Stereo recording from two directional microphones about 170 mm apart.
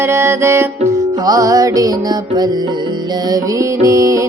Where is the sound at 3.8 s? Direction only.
20° right (ahead or behind).